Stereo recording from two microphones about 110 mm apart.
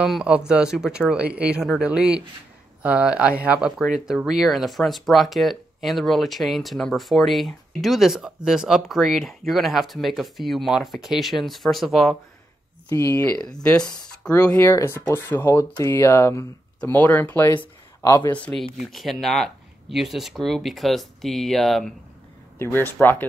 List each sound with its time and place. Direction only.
0.0 s speech: 5° right (ahead or behind)
12.9 s speech: 25° left (ahead or behind)
13.4 s speech: 10° left (ahead or behind)
14.6 s speech: 25° left (ahead or behind)
18.0 s speech: 30° left (ahead or behind)
18.3 s speech: 10° left (ahead or behind)
22.6 s speech: 20° left (ahead or behind)